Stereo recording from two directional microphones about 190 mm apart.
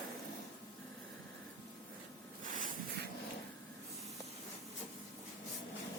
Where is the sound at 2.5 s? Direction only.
45° right (ahead or behind).